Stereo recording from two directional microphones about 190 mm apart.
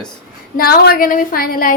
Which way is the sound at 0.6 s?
50° left (ahead or behind).